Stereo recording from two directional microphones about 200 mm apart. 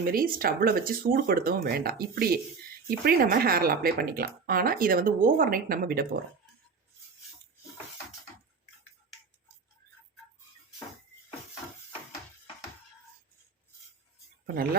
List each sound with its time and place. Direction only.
0.1 s speech: 45° right (ahead or behind)
14.4 s speech: 50° right (ahead or behind)